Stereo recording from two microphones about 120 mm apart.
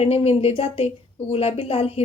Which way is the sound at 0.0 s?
55° left (ahead or behind).